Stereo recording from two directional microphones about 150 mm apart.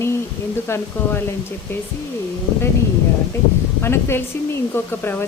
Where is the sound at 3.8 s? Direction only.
15° left (ahead or behind).